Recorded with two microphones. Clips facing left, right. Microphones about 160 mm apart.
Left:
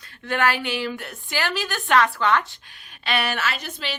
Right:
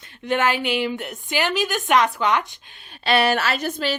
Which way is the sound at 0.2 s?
20° right (ahead or behind).